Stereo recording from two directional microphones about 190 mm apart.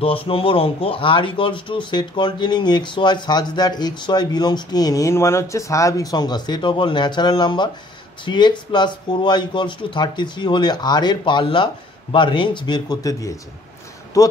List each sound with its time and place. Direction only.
0.0 s speech: 30° left (ahead or behind)